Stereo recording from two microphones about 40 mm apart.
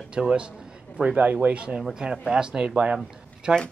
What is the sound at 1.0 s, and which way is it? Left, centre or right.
Speech, right.